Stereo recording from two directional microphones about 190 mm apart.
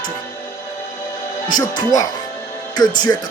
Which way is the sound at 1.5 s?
20° left (ahead or behind).